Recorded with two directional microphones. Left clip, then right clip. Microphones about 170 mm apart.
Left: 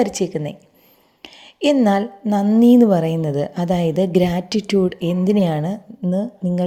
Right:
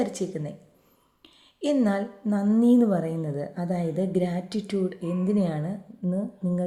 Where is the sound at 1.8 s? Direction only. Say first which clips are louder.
Left 9 dB; 35° left (ahead or behind).